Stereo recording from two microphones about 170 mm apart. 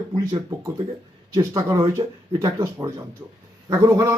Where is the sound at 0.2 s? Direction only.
20° right (ahead or behind).